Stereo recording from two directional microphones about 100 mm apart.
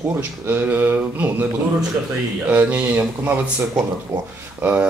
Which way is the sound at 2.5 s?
15° right (ahead or behind).